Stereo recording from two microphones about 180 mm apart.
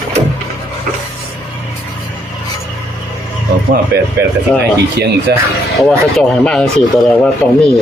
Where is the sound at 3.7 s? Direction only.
60° right (ahead or behind).